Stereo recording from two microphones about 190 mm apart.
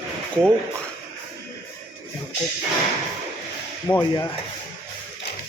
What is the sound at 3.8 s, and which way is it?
Speech, 10° left (ahead or behind).